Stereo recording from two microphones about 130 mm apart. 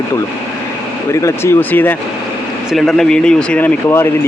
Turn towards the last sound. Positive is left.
turn(degrees=15)  # may be behind; listen again after turning